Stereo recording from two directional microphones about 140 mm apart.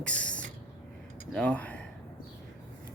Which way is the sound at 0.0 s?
10° left (ahead or behind).